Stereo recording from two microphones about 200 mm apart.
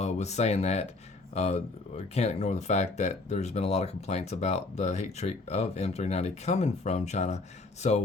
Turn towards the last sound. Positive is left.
turn(degrees=35)  # may be behind; listen again after turning